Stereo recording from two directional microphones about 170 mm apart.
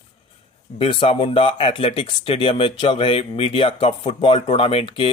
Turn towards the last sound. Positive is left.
turn(degrees=35)  # may be behind; listen again after turning